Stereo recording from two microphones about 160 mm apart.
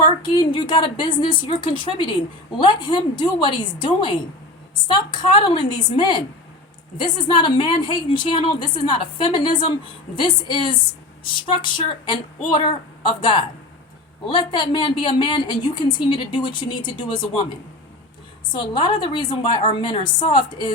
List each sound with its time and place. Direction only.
0.0 s a woman's voice: 30° left (ahead or behind)
18.5 s a woman's voice: 30° left (ahead or behind)